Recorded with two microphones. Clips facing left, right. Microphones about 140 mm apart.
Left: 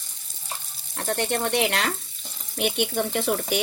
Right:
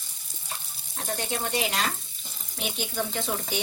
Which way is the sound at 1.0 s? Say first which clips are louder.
Left 6 dB; 65° left (ahead or behind).